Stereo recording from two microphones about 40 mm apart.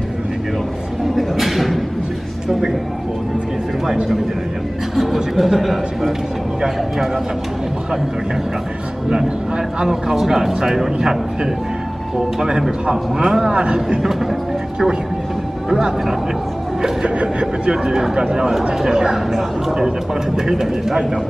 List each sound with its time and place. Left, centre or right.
1.1 s a sound: centre
3.8 s speech: centre
9.8 s a man's voice: centre
15.7 s speech: centre
17.2 s a man's voice: right